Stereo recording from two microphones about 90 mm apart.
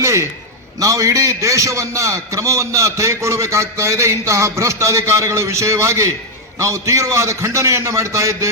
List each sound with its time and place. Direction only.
0.0 s a man's voice: 35° right (ahead or behind)